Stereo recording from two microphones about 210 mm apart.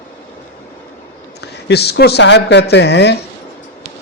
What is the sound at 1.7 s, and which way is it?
Speech, 50° left (ahead or behind).